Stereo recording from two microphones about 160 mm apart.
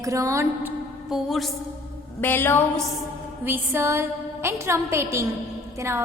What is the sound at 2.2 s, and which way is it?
Speech, 10° left (ahead or behind).